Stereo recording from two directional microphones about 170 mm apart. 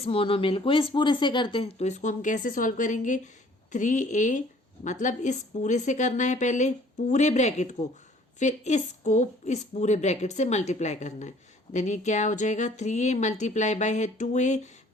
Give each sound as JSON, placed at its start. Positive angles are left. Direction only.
{"t": 0.0, "sound": "a woman's voice", "side_deg": 35}